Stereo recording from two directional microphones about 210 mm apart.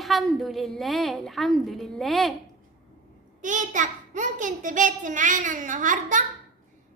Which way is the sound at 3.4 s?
35° right (ahead or behind).